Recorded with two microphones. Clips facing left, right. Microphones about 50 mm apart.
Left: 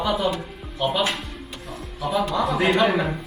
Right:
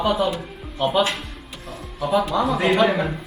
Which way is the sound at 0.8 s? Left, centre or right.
Right.